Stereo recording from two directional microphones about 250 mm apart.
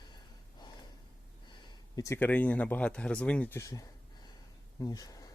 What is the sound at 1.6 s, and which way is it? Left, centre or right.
Speech, centre.